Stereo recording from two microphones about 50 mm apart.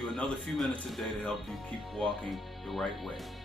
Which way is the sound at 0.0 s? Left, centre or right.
Centre.